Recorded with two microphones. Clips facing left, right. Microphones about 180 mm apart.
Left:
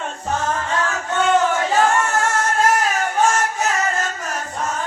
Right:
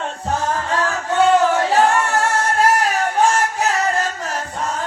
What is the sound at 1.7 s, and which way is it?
Singing, 35° right (ahead or behind).